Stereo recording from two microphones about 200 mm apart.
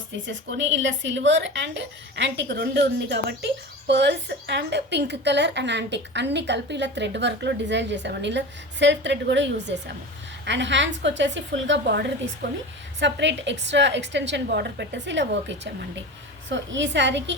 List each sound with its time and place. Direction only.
0.3 s a woman's voice: 70° right (ahead or behind)